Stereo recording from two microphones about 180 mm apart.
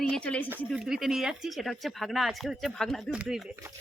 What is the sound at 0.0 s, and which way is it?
Speech, 5° left (ahead or behind).